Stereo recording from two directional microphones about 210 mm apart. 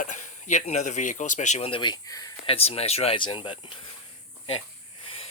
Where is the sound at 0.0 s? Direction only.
35° left (ahead or behind); by 2.6 s 15° left (ahead or behind).